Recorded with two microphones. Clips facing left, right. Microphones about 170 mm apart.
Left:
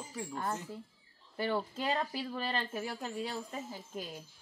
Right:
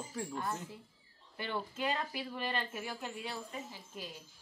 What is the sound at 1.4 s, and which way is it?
Speech, 35° left (ahead or behind).